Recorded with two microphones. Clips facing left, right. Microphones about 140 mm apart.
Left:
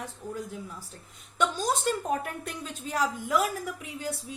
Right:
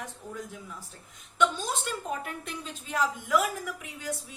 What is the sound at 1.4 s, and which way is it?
A woman's voice, 40° left (ahead or behind).